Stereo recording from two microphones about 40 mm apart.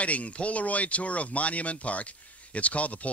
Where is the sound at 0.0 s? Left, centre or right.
Left.